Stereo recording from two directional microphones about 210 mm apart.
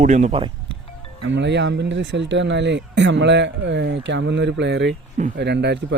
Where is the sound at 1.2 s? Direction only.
55° right (ahead or behind).